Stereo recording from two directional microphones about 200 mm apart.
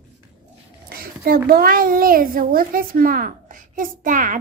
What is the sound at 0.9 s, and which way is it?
A child's voice, 50° right (ahead or behind).